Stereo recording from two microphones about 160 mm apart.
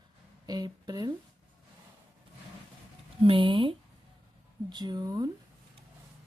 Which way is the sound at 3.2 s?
35° right (ahead or behind).